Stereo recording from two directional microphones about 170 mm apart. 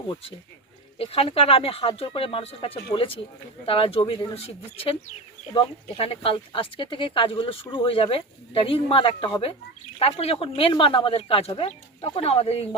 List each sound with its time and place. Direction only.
0.9 s speech: 35° left (ahead or behind)